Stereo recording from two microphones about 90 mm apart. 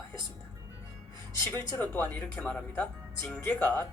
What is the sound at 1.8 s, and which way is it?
Speech, 20° left (ahead or behind).